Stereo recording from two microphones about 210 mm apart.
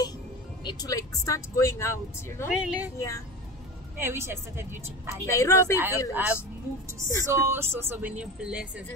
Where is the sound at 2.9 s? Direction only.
15° left (ahead or behind).